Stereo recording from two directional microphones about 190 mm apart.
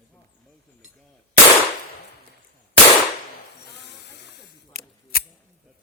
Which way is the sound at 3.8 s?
60° left (ahead or behind).